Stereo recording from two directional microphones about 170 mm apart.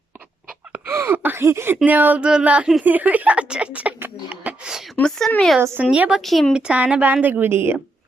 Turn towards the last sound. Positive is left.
turn(degrees=-15)  # may be behind; listen again after turning